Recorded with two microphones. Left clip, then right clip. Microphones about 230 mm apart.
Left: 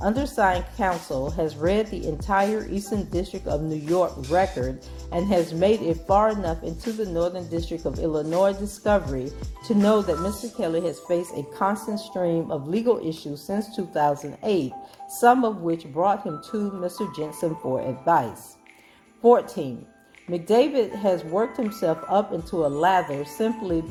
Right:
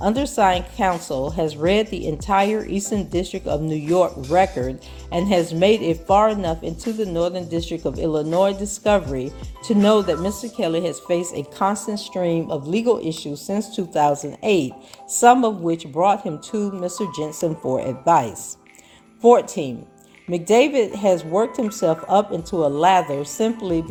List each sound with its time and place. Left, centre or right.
0.0 s speech: right